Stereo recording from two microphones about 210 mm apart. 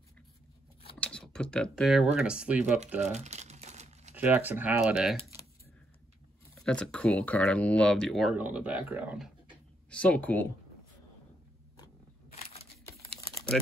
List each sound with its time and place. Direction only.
0.9 s computer keyboard: 5° left (ahead or behind)
2.1 s speech: 5° right (ahead or behind)
3.0 s crumpling: 30° right (ahead or behind)
4.1 s speech: 10° right (ahead or behind)
6.6 s speech: 5° left (ahead or behind)
9.8 s speech: 5° left (ahead or behind)